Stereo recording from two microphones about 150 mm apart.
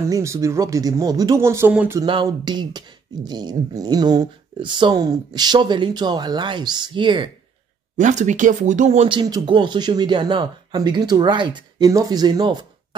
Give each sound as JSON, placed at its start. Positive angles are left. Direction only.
{"t": 0.0, "sound": "speech", "side_deg": -20}
{"t": 1.7, "sound": "a sound", "side_deg": -10}
{"t": 2.2, "sound": "speech", "side_deg": -30}
{"t": 8.0, "sound": "speech", "side_deg": -55}
{"t": 9.1, "sound": "speech", "side_deg": -30}